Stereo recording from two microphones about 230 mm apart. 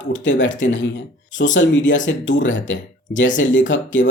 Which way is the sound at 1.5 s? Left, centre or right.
Left.